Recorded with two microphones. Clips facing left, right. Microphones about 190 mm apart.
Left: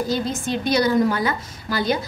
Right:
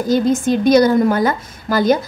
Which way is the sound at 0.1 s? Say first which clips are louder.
Right 9 dB; 50° right (ahead or behind).